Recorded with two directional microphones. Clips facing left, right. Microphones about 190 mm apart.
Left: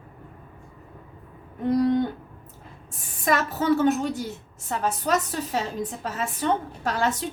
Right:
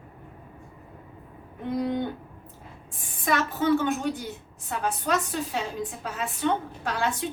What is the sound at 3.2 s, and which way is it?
A woman's voice, 45° left (ahead or behind).